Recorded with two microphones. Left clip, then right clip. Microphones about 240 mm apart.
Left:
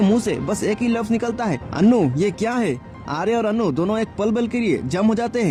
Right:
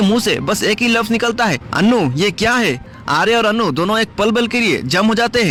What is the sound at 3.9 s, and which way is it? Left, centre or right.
Speech, right.